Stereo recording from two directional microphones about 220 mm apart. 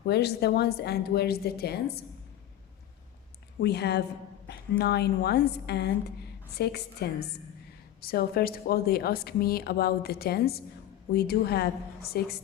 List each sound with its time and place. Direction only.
0.0 s speech: 50° left (ahead or behind)
3.6 s speech: 50° left (ahead or behind)